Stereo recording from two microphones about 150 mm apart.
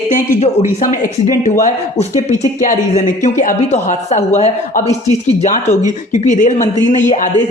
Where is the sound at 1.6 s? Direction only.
50° left (ahead or behind).